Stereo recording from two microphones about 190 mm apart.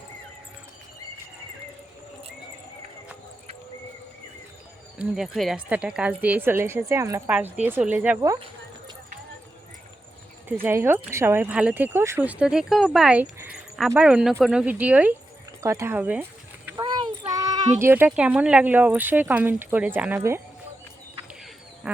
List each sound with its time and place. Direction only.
4.9 s speech: centre (ahead or behind)
10.5 s speech: 10° right (ahead or behind)
16.8 s child singing: 25° right (ahead or behind)
17.7 s speech: 10° right (ahead or behind)
21.8 s speech: 5° right (ahead or behind)